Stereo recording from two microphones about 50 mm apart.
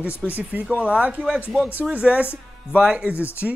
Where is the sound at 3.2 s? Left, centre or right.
Left.